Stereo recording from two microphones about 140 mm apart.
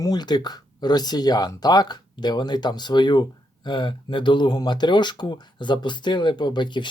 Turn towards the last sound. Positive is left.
turn(degrees=35)  # may be behind; listen again after turning